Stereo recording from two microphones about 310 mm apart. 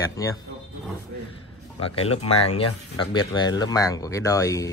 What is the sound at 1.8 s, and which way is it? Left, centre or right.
Speech, centre.